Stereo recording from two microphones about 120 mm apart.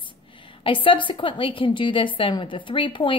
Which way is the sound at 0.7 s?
45° left (ahead or behind).